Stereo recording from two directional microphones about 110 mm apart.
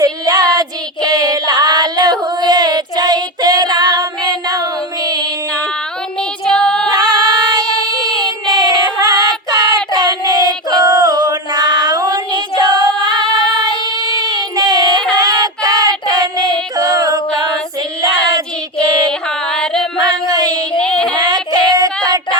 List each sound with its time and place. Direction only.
0.0 s child singing: 35° right (ahead or behind)
6.4 s music: 5° left (ahead or behind)
6.9 s female singing: 35° right (ahead or behind)
8.2 s child singing: 35° right (ahead or behind)
12.8 s singing: 40° right (ahead or behind)
13.3 s music: 35° right (ahead or behind)
15.1 s child singing: 35° right (ahead or behind)
19.5 s music: 5° left (ahead or behind)
20.2 s child singing: 35° right (ahead or behind)
20.7 s child singing: 5° left (ahead or behind)
21.2 s child singing: 35° right (ahead or behind)